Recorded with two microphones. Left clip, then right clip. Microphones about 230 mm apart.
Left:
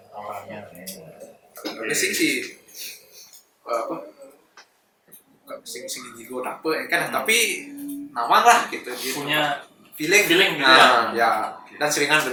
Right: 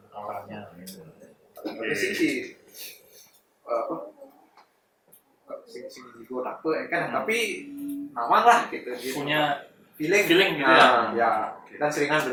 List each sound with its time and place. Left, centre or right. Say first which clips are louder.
0.3 s a sound: left 2 dB; centre
1.7 s a man's voice: left 3 dB; centre
3.7 s speech: left 2 dB; centre
6.3 s speech: left 2 dB; centre